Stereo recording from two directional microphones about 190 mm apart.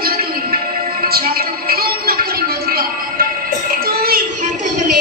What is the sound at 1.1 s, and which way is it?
Music, 50° right (ahead or behind).